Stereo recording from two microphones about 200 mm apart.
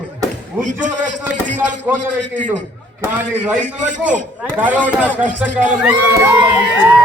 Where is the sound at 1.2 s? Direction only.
10° right (ahead or behind).